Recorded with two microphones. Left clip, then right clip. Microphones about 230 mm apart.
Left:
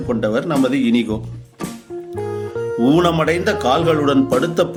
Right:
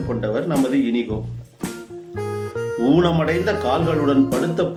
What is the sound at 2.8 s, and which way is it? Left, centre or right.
Speech, left.